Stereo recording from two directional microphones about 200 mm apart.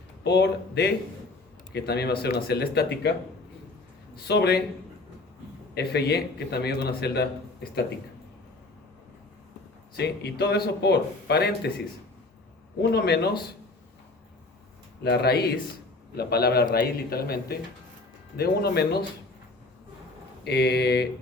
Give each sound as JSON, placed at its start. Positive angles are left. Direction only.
{"t": 0.3, "sound": "a man's voice", "side_deg": 55}
{"t": 4.3, "sound": "a man's voice", "side_deg": 55}
{"t": 5.7, "sound": "a man's voice", "side_deg": 55}
{"t": 10.0, "sound": "a man's voice", "side_deg": 55}
{"t": 12.9, "sound": "a man's voice", "side_deg": 55}
{"t": 15.0, "sound": "a man's voice", "side_deg": 55}
{"t": 20.4, "sound": "a man's voice", "side_deg": 55}